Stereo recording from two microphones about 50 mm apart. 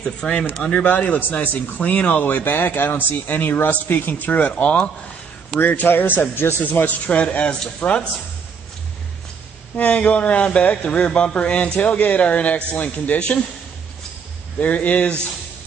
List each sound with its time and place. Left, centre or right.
0.0 s speech: centre
0.7 s speech: left
5.6 s speech: left
7.1 s speech: left
9.8 s speech: left
14.6 s speech: left